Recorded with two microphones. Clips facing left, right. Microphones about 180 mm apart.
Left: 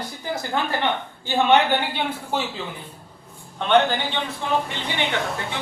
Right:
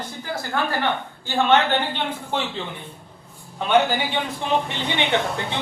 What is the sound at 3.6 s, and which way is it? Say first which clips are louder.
A man's voice: even; 5° right (ahead or behind).